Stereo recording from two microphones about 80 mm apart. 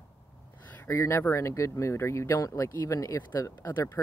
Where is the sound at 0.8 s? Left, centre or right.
Left.